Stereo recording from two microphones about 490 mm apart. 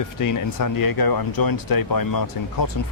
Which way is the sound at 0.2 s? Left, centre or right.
Left.